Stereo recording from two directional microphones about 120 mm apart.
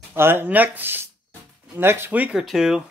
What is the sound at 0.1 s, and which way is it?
Speech, 20° right (ahead or behind).